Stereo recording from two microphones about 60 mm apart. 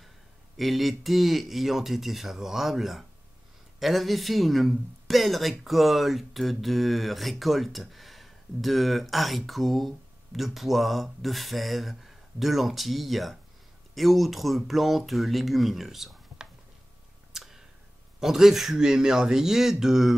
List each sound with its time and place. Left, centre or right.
0.6 s speech: centre
17.3 s a sound: centre
18.2 s speech: centre